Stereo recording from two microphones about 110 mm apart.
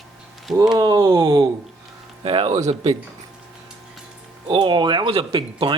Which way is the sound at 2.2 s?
60° right (ahead or behind).